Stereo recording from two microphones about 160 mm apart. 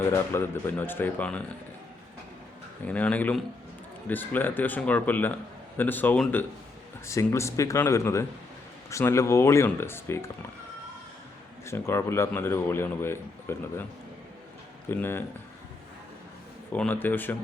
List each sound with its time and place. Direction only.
0.1 s speech: 15° left (ahead or behind)
2.8 s speech: 10° left (ahead or behind)
11.6 s speech: 15° left (ahead or behind)
14.8 s speech: 15° left (ahead or behind)
16.7 s speech: 10° left (ahead or behind)